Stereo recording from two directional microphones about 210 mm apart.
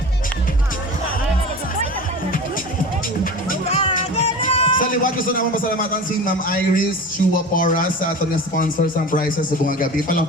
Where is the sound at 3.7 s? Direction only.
25° left (ahead or behind).